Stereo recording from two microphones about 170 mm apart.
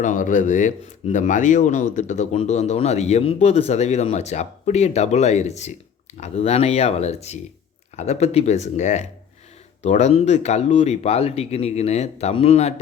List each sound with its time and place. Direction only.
0.0 s speech: 45° left (ahead or behind)